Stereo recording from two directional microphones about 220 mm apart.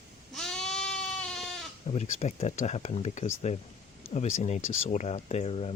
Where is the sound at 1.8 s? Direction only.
30° left (ahead or behind).